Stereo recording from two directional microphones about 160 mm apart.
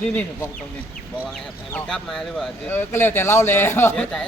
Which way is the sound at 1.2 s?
5° left (ahead or behind).